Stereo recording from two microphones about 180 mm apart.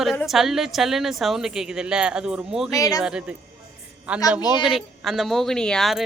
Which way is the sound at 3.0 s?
5° right (ahead or behind).